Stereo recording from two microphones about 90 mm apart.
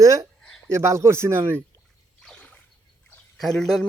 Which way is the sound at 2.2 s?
10° left (ahead or behind).